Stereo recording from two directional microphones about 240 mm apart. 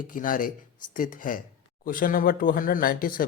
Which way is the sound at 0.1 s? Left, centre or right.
Left.